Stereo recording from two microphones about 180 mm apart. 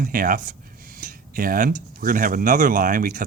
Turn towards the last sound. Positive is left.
turn(degrees=-50)  # may be behind; listen again after turning